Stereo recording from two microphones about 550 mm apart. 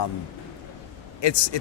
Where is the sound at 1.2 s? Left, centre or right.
Left.